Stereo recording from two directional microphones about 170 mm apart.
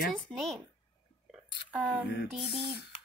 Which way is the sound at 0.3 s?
Centre (ahead or behind).